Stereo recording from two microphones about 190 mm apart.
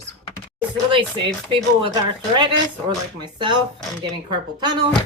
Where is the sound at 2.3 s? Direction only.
25° right (ahead or behind).